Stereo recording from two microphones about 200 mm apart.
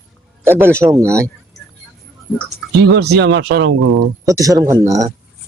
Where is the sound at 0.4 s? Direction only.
10° right (ahead or behind).